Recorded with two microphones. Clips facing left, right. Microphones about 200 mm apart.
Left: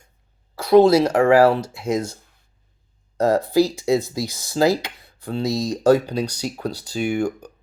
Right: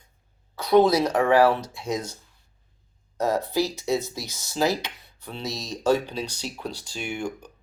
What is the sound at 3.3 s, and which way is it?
Speech, 15° left (ahead or behind).